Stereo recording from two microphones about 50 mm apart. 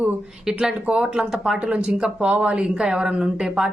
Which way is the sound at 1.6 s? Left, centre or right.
Right.